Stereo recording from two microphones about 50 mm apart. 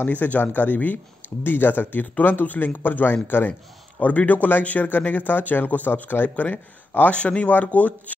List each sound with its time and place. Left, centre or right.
0.0 s speech: left